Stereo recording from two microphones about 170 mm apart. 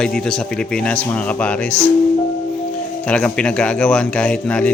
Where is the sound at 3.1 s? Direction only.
5° left (ahead or behind).